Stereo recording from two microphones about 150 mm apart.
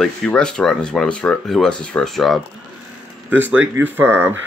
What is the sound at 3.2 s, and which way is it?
Speech, 10° right (ahead or behind).